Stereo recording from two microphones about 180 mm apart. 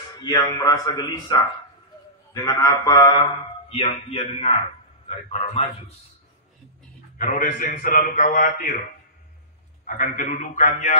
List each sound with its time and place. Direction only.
0.2 s a man's voice: 20° left (ahead or behind)
2.4 s a man's voice: 20° left (ahead or behind); by 5.7 s 35° left (ahead or behind)
7.2 s a man's voice: 50° left (ahead or behind)
9.8 s a man's voice: 45° left (ahead or behind)